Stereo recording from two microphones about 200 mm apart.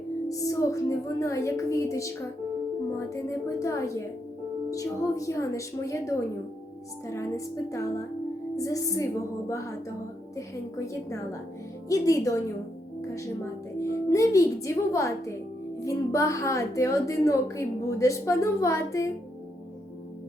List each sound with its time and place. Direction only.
0.3 s a woman's voice: 15° left (ahead or behind)